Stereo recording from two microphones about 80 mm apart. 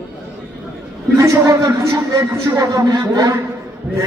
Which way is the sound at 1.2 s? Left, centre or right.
Right.